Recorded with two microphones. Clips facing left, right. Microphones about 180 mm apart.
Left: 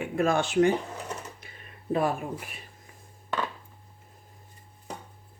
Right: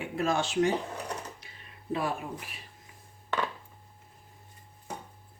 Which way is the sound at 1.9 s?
50° left (ahead or behind).